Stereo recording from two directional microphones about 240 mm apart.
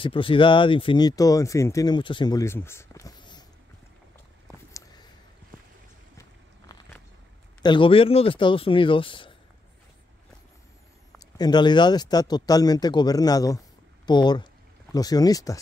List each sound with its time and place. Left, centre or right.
0.0 s speech: left
7.6 s speech: left
11.3 s speech: centre